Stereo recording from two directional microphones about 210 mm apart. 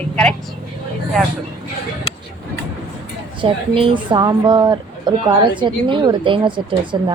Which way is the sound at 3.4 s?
25° right (ahead or behind).